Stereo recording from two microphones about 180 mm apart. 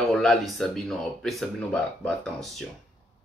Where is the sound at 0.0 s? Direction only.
Centre (ahead or behind).